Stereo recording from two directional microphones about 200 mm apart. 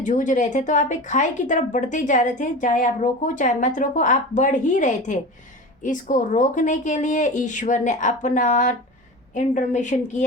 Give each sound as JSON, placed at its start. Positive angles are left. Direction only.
{"t": 0.0, "sound": "speech", "side_deg": 40}